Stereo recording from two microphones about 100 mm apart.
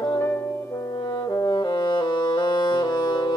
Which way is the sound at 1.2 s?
40° left (ahead or behind).